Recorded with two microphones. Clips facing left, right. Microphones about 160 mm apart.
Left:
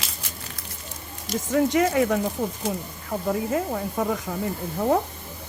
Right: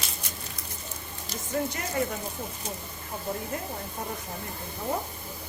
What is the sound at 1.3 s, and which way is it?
Speech, 90° left.